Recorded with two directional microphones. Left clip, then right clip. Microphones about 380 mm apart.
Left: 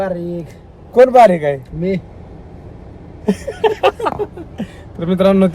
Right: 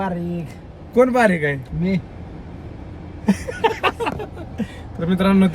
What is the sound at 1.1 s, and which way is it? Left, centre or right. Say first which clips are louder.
Speech: left 8 dB; left.